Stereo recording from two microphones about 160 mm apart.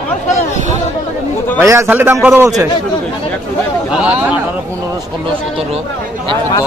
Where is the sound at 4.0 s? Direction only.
10° right (ahead or behind).